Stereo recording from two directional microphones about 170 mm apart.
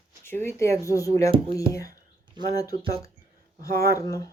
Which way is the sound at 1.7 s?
20° left (ahead or behind).